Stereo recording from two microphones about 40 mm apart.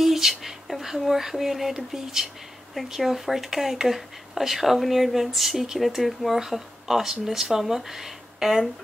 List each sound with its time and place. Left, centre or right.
0.0 s speech: centre